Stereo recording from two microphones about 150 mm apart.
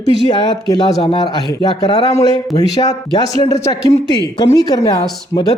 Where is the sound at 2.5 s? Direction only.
25° left (ahead or behind).